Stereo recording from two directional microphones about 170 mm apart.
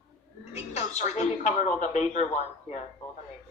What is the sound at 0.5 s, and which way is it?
Speech, 40° left (ahead or behind).